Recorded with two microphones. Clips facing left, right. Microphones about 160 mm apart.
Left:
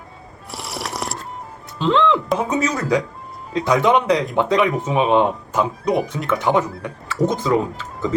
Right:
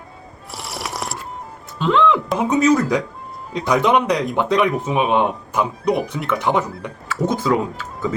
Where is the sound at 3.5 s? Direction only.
15° right (ahead or behind).